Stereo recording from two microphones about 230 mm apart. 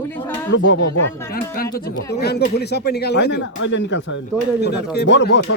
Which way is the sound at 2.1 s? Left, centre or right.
Left.